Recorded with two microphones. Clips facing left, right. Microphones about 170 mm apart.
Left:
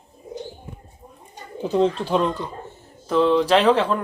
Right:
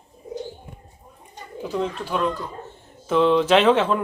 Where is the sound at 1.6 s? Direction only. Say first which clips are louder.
Left 6 dB; 30° left (ahead or behind).